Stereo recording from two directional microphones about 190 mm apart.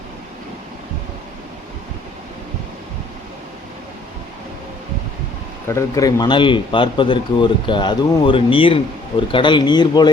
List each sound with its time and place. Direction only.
5.6 s speech: 15° left (ahead or behind)